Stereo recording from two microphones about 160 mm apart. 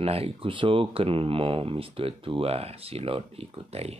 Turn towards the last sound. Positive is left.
turn(degrees=-40)  # may be behind; listen again after turning